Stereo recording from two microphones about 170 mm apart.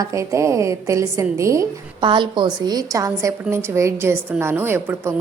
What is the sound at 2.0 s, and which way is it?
A woman's voice, 30° right (ahead or behind).